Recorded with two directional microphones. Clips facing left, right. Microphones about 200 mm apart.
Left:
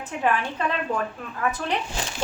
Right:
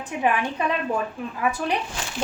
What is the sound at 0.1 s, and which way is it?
A woman's voice, 15° right (ahead or behind).